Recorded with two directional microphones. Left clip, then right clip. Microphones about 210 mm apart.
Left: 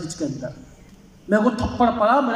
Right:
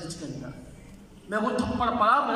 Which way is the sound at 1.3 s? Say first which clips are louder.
Left 7 dB; 35° left (ahead or behind).